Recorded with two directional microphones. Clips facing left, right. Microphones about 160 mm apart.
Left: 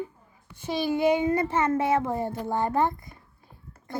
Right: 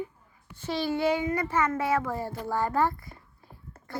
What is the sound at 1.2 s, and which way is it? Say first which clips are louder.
A child's voice: left 3 dB; 25° left (ahead or behind).